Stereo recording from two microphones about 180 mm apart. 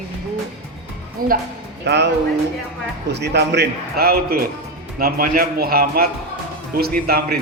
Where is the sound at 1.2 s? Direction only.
55° right (ahead or behind).